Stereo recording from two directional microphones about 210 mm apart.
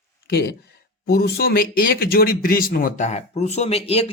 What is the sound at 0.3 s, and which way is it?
Speech, 45° left (ahead or behind).